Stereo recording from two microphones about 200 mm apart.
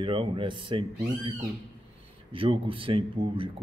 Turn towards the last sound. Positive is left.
turn(degrees=-25)  # may be behind; listen again after turning